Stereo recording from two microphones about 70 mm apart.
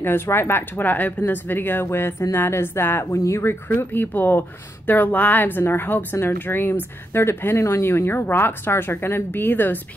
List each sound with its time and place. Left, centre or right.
0.0 s a woman's voice: left